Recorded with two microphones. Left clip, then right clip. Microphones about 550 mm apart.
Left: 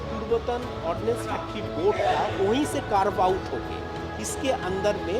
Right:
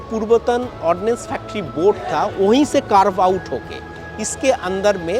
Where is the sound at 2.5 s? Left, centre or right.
Right.